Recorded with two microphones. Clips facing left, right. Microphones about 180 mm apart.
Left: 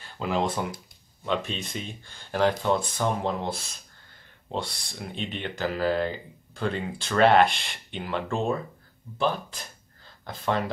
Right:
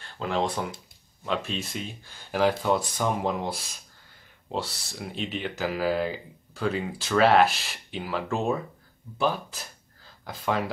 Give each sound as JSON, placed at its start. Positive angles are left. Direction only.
{"t": 0.0, "sound": "speech", "side_deg": 5}